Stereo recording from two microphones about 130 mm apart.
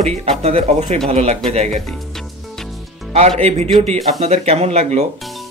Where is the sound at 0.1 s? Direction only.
50° right (ahead or behind).